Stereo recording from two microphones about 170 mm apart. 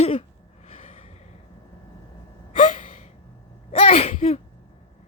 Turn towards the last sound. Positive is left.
turn(degrees=35)  # may be behind; listen again after turning